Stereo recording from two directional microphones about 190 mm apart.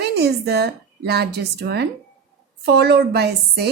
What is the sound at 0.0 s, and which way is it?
A woman's voice, 60° right (ahead or behind).